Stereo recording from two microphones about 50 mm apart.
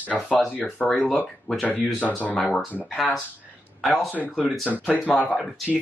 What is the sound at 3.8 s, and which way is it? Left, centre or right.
Speech, centre.